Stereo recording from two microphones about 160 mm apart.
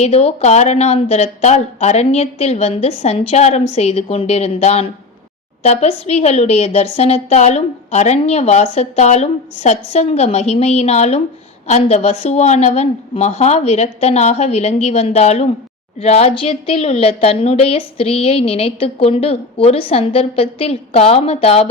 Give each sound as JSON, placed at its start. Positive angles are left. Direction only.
{"t": 0.0, "sound": "a woman's voice", "side_deg": 40}